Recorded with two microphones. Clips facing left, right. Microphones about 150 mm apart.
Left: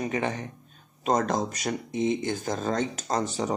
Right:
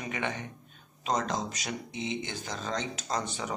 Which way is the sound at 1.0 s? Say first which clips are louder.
Left 6 dB; 50° left (ahead or behind).